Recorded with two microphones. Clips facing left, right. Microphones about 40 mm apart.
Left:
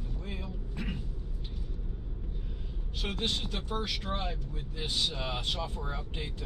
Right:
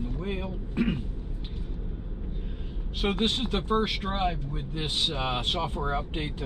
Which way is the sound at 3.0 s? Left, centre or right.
Right.